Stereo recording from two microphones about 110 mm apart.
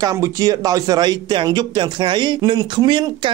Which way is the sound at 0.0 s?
30° right (ahead or behind).